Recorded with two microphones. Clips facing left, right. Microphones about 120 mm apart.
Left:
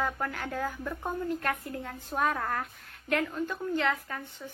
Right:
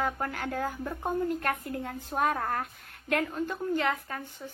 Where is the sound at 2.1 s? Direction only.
40° right (ahead or behind).